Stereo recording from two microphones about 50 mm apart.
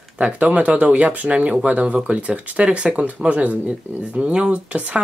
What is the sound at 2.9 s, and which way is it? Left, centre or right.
Speech, right.